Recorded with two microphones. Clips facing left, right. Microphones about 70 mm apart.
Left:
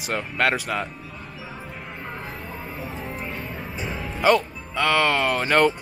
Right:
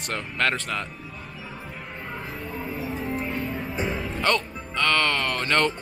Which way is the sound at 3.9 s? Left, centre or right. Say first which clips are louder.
Left 6 dB; centre.